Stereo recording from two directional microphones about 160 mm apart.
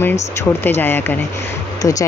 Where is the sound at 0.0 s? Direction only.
15° left (ahead or behind).